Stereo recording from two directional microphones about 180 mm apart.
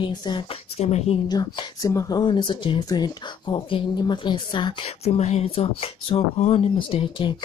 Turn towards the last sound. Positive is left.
turn(degrees=30)  # may be behind; listen again after turning